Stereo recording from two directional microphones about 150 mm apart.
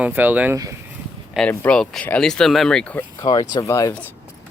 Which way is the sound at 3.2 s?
25° left (ahead or behind).